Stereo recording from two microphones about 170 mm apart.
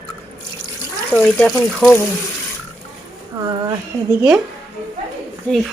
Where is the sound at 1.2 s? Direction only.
10° left (ahead or behind).